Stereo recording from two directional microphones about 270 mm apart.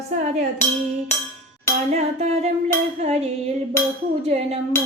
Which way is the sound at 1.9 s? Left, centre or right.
Right.